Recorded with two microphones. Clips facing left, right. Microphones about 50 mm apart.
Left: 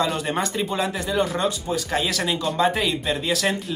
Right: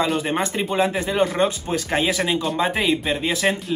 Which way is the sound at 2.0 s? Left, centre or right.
Right.